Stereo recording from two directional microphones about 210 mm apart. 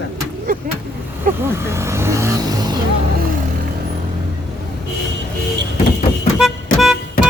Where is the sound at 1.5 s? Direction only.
15° right (ahead or behind).